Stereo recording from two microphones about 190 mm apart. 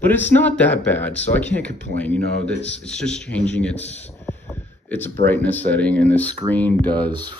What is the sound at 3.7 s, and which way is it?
Speech, 35° left (ahead or behind).